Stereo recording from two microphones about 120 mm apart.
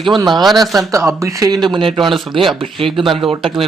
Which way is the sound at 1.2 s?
25° right (ahead or behind).